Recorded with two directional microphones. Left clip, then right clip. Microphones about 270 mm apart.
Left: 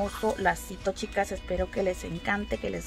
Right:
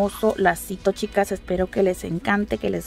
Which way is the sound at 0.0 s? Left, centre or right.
Right.